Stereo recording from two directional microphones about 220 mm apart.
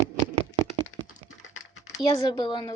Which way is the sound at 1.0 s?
35° left (ahead or behind).